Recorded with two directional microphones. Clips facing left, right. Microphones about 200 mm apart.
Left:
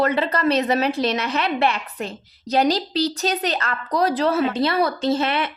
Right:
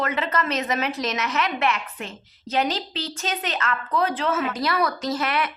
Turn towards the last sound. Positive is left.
turn(degrees=25)  # may be behind; listen again after turning